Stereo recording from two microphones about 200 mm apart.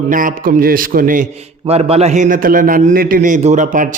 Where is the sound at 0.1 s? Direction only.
40° right (ahead or behind).